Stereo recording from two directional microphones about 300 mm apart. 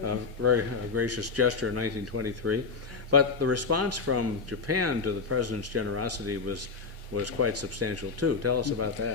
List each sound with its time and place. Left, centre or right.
0.0 s speech: right